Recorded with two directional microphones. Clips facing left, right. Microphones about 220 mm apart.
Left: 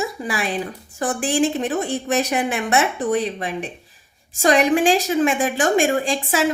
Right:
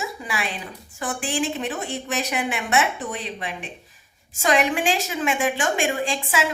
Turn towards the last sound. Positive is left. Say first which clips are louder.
# left 5 dB
turn(degrees=40)  # may be behind; listen again after turning